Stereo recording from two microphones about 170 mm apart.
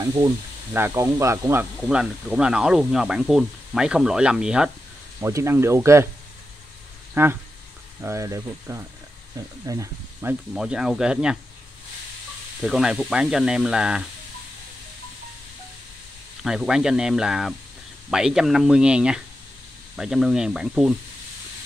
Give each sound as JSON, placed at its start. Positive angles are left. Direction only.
{"t": 0.0, "sound": "speech", "side_deg": -25}
{"t": 5.2, "sound": "speech", "side_deg": -15}
{"t": 7.2, "sound": "speech", "side_deg": -15}
{"t": 10.5, "sound": "speech", "side_deg": -5}
{"t": 12.6, "sound": "speech", "side_deg": -5}
{"t": 16.4, "sound": "speech", "side_deg": -5}